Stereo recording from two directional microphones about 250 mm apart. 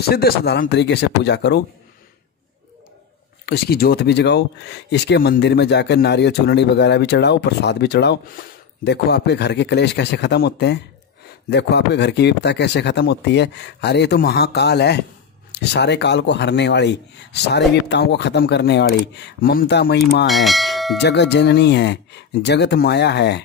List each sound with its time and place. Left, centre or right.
0.1 s speech: left
3.4 s speech: left
20.2 s speech: centre
21.0 s speech: left